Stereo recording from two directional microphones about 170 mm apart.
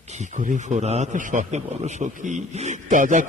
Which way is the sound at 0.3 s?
45° right (ahead or behind).